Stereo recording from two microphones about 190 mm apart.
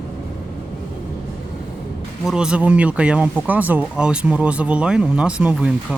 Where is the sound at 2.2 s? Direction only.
5° right (ahead or behind).